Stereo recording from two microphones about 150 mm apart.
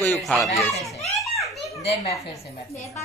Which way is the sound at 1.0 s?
Centre (ahead or behind).